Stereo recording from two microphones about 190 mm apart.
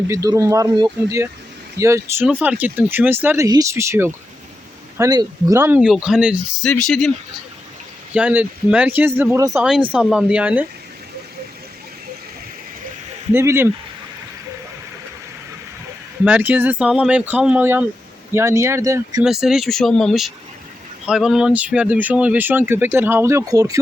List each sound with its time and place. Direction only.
0.1 s speech: 15° right (ahead or behind); by 7.1 s centre (ahead or behind)
8.1 s speech: 10° right (ahead or behind)
9.9 s speech: 5° right (ahead or behind)
13.3 s speech: 15° right (ahead or behind)
16.2 s speech: 10° right (ahead or behind)
19.2 s speech: centre (ahead or behind); by 23.8 s 20° right (ahead or behind)